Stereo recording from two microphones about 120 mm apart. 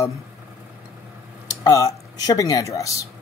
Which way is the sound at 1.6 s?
30° left (ahead or behind).